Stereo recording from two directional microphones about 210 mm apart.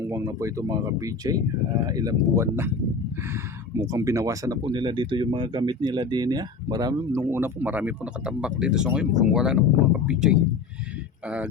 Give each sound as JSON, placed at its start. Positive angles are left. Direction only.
{"t": 0.0, "sound": "speech", "side_deg": -15}
{"t": 3.8, "sound": "speech", "side_deg": -15}